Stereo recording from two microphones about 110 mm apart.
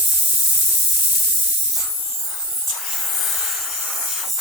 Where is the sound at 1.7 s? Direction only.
5° right (ahead or behind).